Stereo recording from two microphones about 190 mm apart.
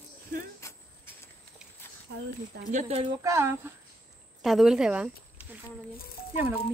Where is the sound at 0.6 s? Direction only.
15° left (ahead or behind).